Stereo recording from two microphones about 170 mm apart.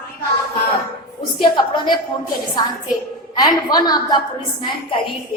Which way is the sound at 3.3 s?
25° left (ahead or behind).